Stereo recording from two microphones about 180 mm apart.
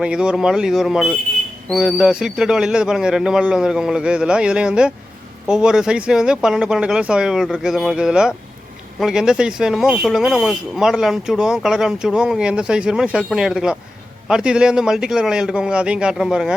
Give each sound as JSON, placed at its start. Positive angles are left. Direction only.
{"t": 0.0, "sound": "speech", "side_deg": -5}